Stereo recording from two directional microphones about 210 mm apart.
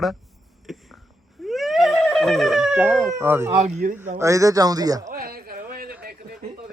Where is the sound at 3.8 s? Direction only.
40° right (ahead or behind).